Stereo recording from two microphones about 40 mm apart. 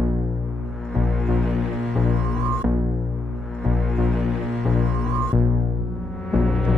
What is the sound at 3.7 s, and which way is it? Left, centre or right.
Music, centre.